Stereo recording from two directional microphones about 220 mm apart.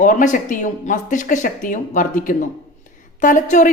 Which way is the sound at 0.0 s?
35° left (ahead or behind).